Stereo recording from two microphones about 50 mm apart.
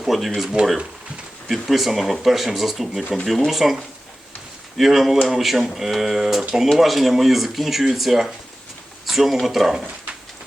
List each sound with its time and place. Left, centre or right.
0.0 s speech: centre
0.6 s speech: right
1.5 s speech: centre
4.8 s speech: centre